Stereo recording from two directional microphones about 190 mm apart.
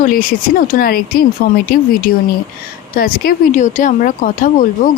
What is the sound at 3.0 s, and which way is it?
Speech, 50° left (ahead or behind).